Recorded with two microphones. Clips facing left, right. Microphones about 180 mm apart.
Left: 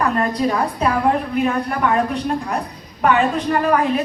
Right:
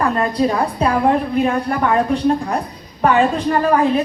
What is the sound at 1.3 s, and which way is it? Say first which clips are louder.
A woman's voice: right 2 dB; 30° right (ahead or behind).